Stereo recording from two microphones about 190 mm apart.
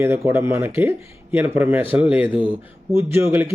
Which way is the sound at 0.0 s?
15° right (ahead or behind).